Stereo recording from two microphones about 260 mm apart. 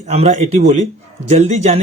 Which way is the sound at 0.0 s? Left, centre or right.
Right.